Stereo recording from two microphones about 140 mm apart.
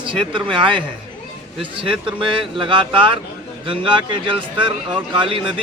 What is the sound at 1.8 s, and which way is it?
Speech, 40° right (ahead or behind).